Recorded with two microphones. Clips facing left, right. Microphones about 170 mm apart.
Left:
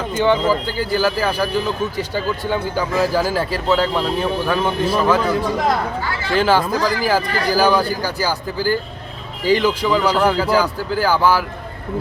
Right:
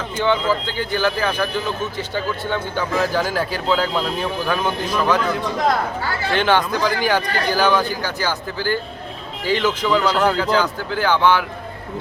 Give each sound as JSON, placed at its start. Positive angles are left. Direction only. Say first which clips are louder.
{"t": 0.6, "sound": "speech", "louder": "left 2 dB", "side_deg": 5}
{"t": 4.9, "sound": "speech", "louder": "left 2 dB", "side_deg": 30}
{"t": 5.2, "sound": "speech", "louder": "left 2 dB", "side_deg": 10}